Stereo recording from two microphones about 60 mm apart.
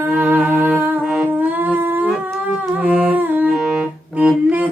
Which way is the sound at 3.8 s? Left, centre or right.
Right.